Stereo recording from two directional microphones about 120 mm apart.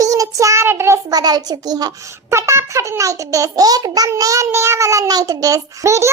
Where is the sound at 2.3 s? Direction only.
25° right (ahead or behind).